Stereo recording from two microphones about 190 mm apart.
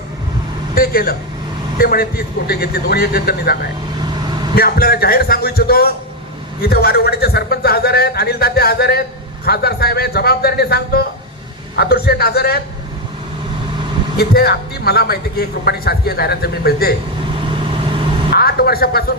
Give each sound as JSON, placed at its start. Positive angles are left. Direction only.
{"t": 0.8, "sound": "a man's voice", "side_deg": 50}
{"t": 14.2, "sound": "a man's voice", "side_deg": 55}
{"t": 17.3, "sound": "vehicle", "side_deg": -25}
{"t": 18.3, "sound": "speech", "side_deg": 55}